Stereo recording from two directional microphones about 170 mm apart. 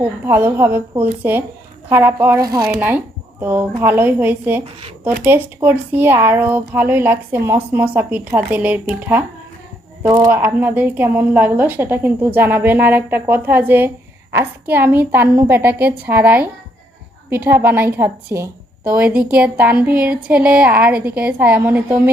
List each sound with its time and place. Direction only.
0.3 s speech: 15° right (ahead or behind)